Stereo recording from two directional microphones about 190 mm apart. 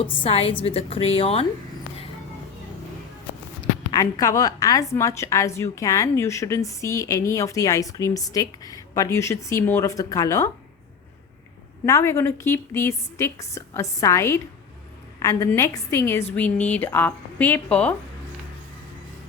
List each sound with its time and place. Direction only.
0.0 s a woman's voice: 30° left (ahead or behind)
3.6 s a woman's voice: 20° left (ahead or behind)
11.9 s a woman's voice: 15° left (ahead or behind)